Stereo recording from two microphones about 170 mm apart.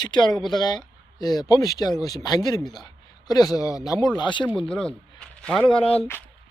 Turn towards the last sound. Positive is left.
turn(degrees=35)  # may be behind; listen again after turning